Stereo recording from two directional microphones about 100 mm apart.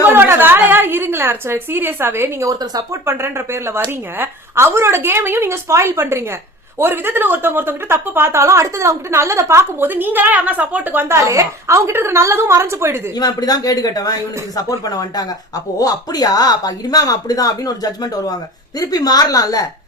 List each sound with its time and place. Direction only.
0.0 s a woman's voice: 20° right (ahead or behind)
11.1 s a woman's voice: 30° right (ahead or behind)
13.1 s speech: 40° left (ahead or behind)